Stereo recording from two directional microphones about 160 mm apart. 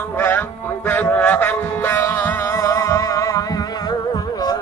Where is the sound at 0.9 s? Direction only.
10° left (ahead or behind).